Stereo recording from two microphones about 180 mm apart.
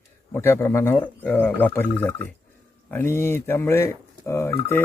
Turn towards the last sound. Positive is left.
turn(degrees=15)  # may be behind; listen again after turning